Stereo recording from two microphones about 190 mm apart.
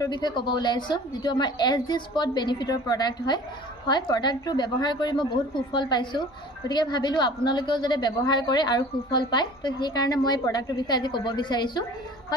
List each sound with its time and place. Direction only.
0.0 s a woman's voice: 20° left (ahead or behind)